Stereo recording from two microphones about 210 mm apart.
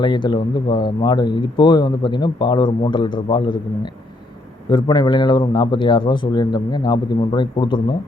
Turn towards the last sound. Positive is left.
turn(degrees=20)  # may be behind; listen again after turning